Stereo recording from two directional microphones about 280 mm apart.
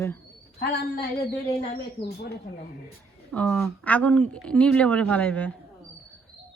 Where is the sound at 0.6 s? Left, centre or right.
Left.